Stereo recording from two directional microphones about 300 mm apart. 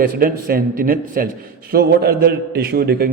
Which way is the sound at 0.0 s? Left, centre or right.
Right.